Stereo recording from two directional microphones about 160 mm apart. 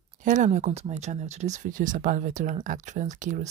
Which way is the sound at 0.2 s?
50° right (ahead or behind).